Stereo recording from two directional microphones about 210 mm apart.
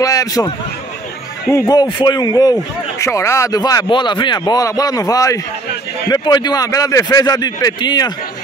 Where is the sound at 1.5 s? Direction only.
15° left (ahead or behind).